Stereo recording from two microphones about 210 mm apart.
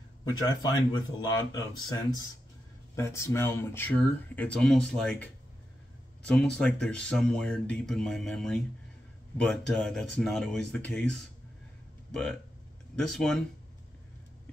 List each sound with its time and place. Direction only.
0.2 s speech: 20° left (ahead or behind); by 13.4 s centre (ahead or behind)